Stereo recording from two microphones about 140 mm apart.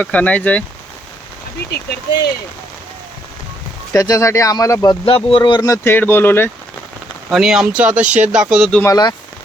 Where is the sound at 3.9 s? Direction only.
25° left (ahead or behind).